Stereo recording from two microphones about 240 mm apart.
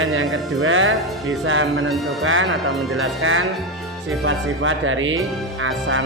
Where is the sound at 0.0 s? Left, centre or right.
Right.